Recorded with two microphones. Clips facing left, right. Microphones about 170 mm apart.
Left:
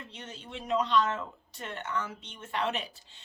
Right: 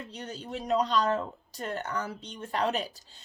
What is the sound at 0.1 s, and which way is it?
A woman's voice, 40° right (ahead or behind).